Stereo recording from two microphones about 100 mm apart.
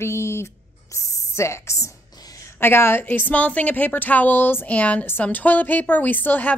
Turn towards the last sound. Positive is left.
turn(degrees=15)  # may be behind; listen again after turning